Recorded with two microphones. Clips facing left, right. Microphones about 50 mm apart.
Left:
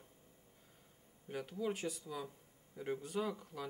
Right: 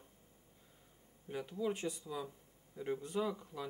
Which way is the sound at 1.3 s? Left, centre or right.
Centre.